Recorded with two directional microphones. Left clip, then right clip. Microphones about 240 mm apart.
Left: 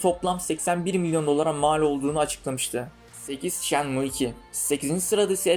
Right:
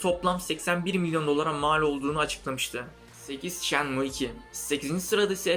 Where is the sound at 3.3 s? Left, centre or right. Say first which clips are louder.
Left 5 dB; centre.